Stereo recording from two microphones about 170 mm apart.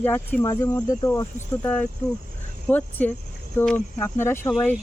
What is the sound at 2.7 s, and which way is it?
Speech, 10° left (ahead or behind).